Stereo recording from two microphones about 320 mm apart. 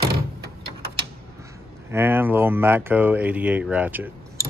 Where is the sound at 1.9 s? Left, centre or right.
Centre.